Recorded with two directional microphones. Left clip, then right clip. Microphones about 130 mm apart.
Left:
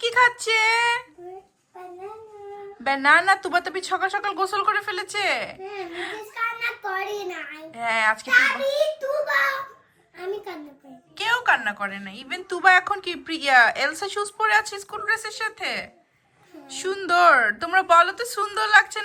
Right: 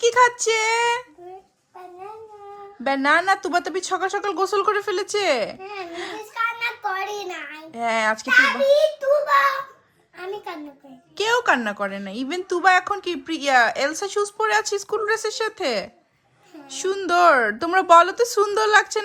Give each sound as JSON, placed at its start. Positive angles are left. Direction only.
{"t": 0.0, "sound": "speech", "side_deg": -40}
{"t": 2.8, "sound": "a woman's voice", "side_deg": -35}
{"t": 6.3, "sound": "child singing", "side_deg": -5}
{"t": 7.7, "sound": "a woman's voice", "side_deg": -40}
{"t": 9.0, "sound": "a child's voice", "side_deg": 0}
{"t": 11.2, "sound": "a woman's voice", "side_deg": -55}
{"t": 12.5, "sound": "speech", "side_deg": -30}
{"t": 16.7, "sound": "speech", "side_deg": -30}